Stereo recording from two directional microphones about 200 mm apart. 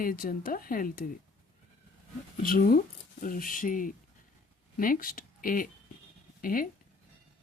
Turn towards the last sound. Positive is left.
turn(degrees=45)  # may be behind; listen again after turning